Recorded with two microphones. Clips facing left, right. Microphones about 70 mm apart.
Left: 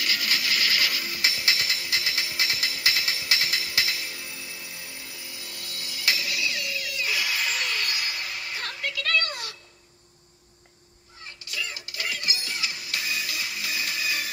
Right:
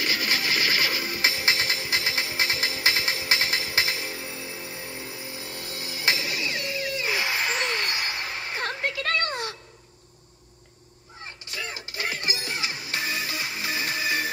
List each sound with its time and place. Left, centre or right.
0.0 s music: right
11.4 s music: right